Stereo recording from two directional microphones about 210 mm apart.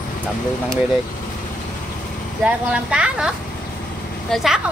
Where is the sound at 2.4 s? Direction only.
5° right (ahead or behind).